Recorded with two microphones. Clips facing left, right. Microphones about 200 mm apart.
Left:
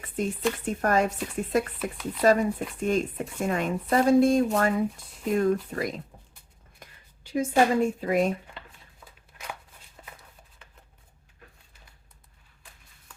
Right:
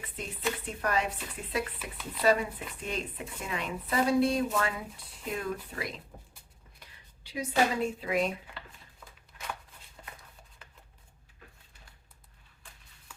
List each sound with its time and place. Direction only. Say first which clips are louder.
0.2 s speech: left 8 dB; 45° left (ahead or behind)
6.8 s a sound: left 6 dB; 50° left (ahead or behind)
7.3 s speech: left 6 dB; 50° left (ahead or behind)